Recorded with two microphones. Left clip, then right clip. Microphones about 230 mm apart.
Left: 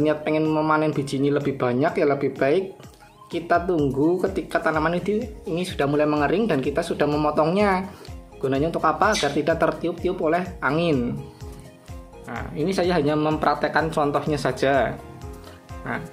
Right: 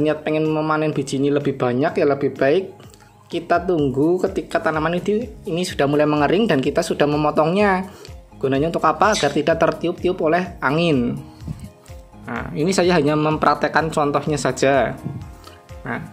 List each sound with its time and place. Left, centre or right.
0.0 s speech: centre
12.3 s speech: right